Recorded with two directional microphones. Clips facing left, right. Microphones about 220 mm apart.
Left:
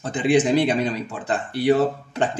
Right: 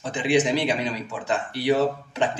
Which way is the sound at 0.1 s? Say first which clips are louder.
Left 3 dB; 50° left (ahead or behind).